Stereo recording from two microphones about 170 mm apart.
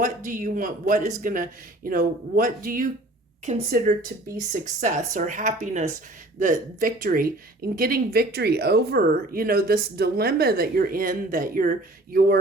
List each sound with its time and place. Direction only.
0.0 s speech: 50° right (ahead or behind)
3.5 s speech: 45° right (ahead or behind)